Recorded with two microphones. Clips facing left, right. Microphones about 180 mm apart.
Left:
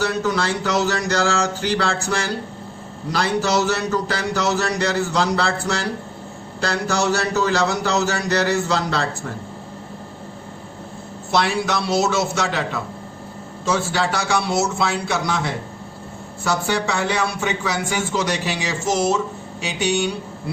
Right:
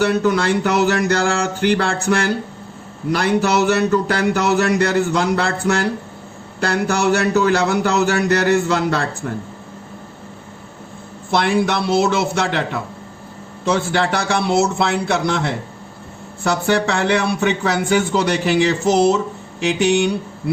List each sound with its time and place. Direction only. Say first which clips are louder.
0.0 s a man's voice: right 5 dB; 55° right (ahead or behind)
11.3 s a man's voice: right 3 dB; 55° right (ahead or behind)
13.7 s a man's voice: right 3 dB; 60° right (ahead or behind)